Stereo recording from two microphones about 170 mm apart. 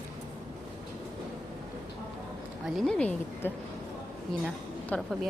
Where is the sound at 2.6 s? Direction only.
Centre (ahead or behind).